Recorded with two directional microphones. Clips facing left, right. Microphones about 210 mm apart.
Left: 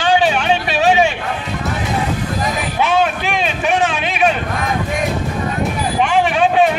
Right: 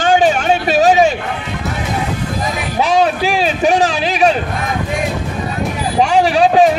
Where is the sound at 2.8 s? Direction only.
35° right (ahead or behind).